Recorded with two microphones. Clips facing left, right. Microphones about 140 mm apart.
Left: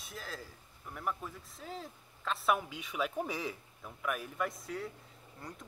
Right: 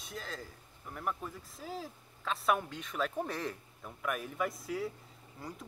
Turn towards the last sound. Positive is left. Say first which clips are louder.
# right 2 dB
turn(degrees=0)  # may be behind; listen again after turning